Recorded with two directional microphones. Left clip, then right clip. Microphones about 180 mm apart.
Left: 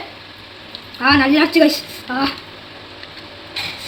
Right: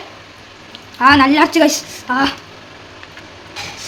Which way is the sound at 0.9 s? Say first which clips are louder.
Right 4 dB; 40° right (ahead or behind).